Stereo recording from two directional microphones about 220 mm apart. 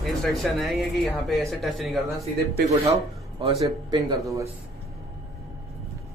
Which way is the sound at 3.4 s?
25° right (ahead or behind).